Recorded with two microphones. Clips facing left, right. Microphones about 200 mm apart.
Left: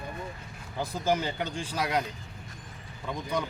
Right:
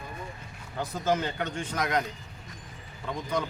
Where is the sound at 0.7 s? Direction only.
10° left (ahead or behind).